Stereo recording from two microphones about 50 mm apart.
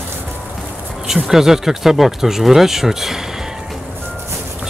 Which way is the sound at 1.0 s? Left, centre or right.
Centre.